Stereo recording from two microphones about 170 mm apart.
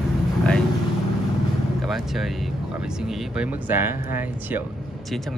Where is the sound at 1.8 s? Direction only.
Centre (ahead or behind).